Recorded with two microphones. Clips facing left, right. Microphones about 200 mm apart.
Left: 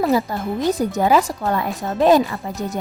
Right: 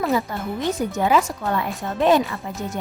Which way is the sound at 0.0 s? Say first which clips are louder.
Left 4 dB; 35° left (ahead or behind).